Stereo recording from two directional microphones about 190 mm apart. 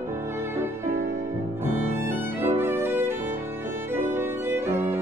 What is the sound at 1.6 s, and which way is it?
Violin, 10° right (ahead or behind).